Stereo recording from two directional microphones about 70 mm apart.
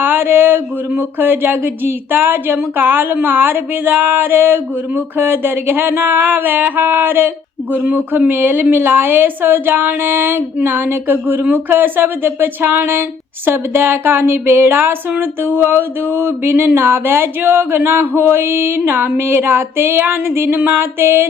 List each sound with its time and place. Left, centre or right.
0.0 s a woman's voice: right